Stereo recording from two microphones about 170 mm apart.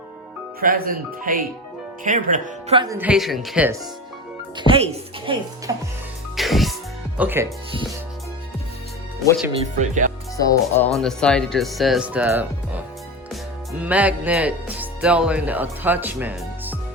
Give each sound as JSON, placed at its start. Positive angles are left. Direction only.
{"t": 0.6, "sound": "speech", "side_deg": -55}
{"t": 2.9, "sound": "speech", "side_deg": -10}
{"t": 4.5, "sound": "speech", "side_deg": -30}
{"t": 5.7, "sound": "speech", "side_deg": -20}
{"t": 6.3, "sound": "music", "side_deg": 0}
{"t": 7.2, "sound": "speech", "side_deg": -10}
{"t": 9.7, "sound": "speech", "side_deg": -45}
{"t": 10.3, "sound": "speech", "side_deg": 20}
{"t": 10.9, "sound": "speech", "side_deg": 5}